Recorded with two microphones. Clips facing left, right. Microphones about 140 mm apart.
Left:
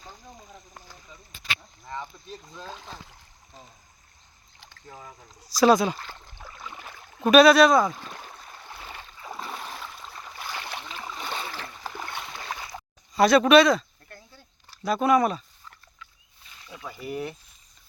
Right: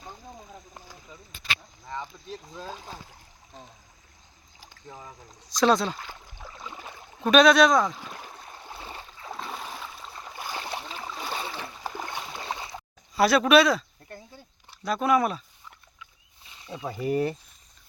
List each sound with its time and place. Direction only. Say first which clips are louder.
1.9 s speech: right 1 dB; centre (ahead or behind)
4.6 s boat: right 1 dB; 10° right (ahead or behind)
5.0 s speech: even; 5° left (ahead or behind)
6.0 s a sound: even; 10° right (ahead or behind)
7.2 s speech: left 2 dB; 5° left (ahead or behind)
7.9 s a sound: even; 10° right (ahead or behind)
9.1 s a sound: left 1 dB; centre (ahead or behind)
10.2 s boat: right 2 dB; 15° right (ahead or behind)
13.1 s speech: left 2 dB; 5° right (ahead or behind)
14.8 s speech: left 2 dB; centre (ahead or behind)
16.6 s speech: right 6 dB; 25° right (ahead or behind)
17.1 s speech: right 7 dB; 35° right (ahead or behind)